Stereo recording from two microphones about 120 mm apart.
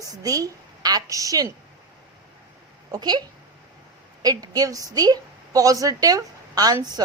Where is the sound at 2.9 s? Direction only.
35° right (ahead or behind).